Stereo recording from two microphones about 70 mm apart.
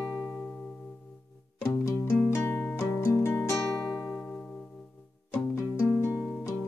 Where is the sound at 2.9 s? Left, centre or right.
Left.